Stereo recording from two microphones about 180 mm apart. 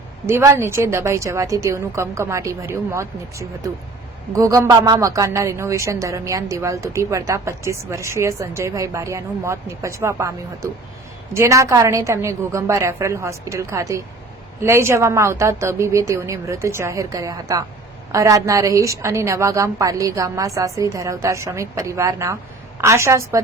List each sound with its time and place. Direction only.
0.3 s a woman's voice: 15° right (ahead or behind)